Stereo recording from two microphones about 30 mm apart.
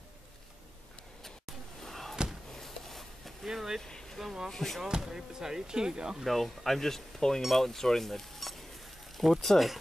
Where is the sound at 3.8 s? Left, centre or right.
Left.